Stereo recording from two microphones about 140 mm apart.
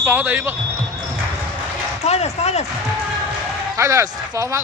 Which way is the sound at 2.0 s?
50° left (ahead or behind).